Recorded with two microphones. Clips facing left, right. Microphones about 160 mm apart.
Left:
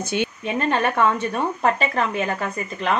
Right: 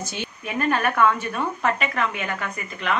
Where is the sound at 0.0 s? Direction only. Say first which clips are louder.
Left 8 dB; 60° left (ahead or behind).